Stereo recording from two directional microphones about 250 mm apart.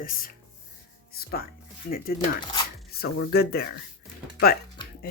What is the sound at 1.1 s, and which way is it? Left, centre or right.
Music, left.